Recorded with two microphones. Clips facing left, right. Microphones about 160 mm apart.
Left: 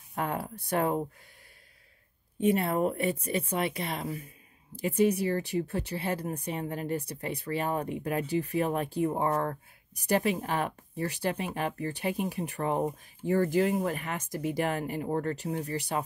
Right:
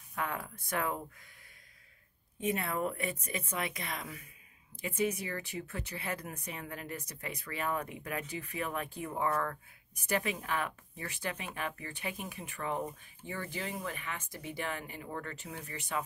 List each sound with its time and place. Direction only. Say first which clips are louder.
0.1 s a sound: left 5 dB; 35° left (ahead or behind)
0.7 s speech: left 7 dB; 35° left (ahead or behind)
2.4 s speech: left 8 dB; 30° left (ahead or behind)